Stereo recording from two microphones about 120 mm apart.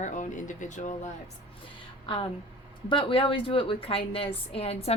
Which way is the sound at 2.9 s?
45° left (ahead or behind).